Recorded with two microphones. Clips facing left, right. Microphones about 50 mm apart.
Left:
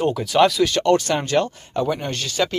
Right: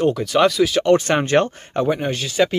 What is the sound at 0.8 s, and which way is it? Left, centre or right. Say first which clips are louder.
Speech: right 2 dB; right.